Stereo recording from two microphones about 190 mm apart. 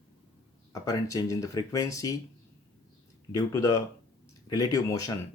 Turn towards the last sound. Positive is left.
turn(degrees=20)  # may be behind; listen again after turning